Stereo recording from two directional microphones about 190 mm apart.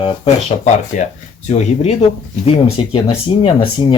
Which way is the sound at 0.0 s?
35° left (ahead or behind).